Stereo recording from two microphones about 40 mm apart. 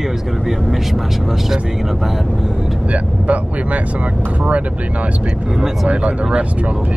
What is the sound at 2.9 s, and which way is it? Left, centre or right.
Speech, right.